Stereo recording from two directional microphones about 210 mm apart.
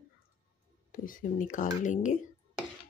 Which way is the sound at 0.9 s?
40° left (ahead or behind).